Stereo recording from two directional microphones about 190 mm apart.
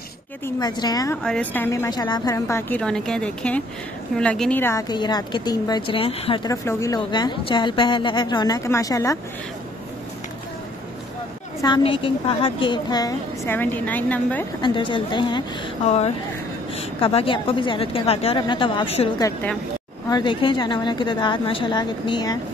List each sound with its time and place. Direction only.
0.6 s a woman's voice: 20° left (ahead or behind)
1.2 s a woman's voice: 5° left (ahead or behind)
11.6 s a woman's voice: 25° left (ahead or behind); by 14.4 s 10° left (ahead or behind)
14.6 s a woman's voice: 25° left (ahead or behind)